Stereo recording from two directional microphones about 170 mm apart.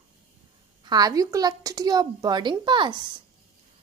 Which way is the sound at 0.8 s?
25° right (ahead or behind).